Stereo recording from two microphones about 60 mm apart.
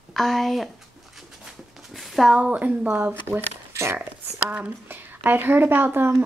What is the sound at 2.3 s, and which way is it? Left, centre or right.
Speech, right.